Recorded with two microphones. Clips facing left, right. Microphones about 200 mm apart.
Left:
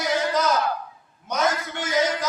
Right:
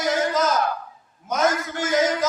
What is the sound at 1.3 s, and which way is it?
Speech, 50° right (ahead or behind).